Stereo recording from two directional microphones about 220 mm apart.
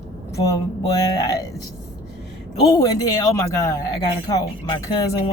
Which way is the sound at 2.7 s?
15° left (ahead or behind).